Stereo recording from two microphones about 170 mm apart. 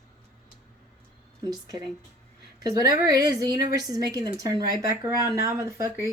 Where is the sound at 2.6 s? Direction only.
20° right (ahead or behind).